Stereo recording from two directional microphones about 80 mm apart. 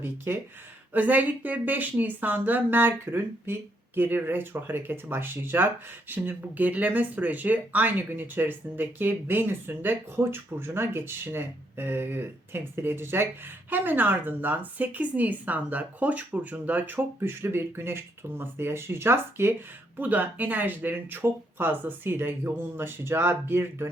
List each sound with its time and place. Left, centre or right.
0.9 s speech: right